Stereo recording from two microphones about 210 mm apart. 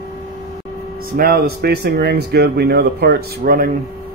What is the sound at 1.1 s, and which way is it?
Speech, 45° right (ahead or behind).